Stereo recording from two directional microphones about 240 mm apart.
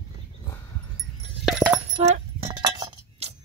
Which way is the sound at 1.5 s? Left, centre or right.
Centre.